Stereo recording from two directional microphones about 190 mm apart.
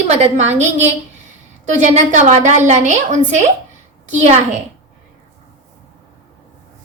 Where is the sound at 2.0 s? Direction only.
40° right (ahead or behind).